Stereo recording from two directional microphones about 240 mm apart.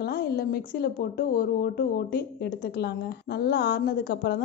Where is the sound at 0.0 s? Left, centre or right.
Left.